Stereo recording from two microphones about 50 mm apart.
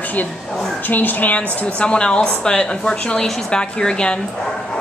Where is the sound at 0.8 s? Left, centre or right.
Left; by 4.2 s centre.